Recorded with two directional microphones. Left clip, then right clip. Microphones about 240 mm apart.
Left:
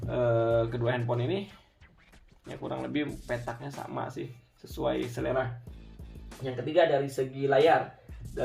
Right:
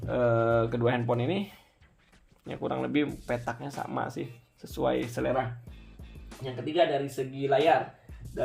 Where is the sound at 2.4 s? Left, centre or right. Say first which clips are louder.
Right 4 dB; right.